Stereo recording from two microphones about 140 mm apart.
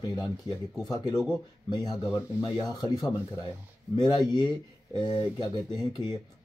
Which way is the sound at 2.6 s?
25° left (ahead or behind).